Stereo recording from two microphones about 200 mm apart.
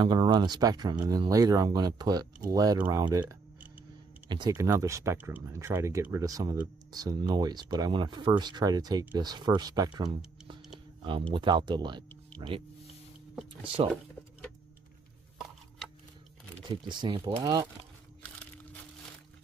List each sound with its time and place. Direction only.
0.0 s speech: 20° right (ahead or behind)
16.8 s speech: 20° right (ahead or behind)